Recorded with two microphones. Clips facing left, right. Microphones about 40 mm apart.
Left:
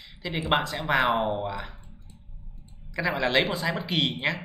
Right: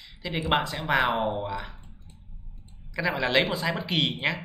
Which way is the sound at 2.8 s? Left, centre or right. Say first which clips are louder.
Left 1 dB; centre.